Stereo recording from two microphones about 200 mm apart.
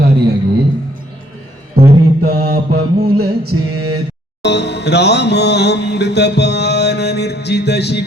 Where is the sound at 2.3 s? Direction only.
45° right (ahead or behind).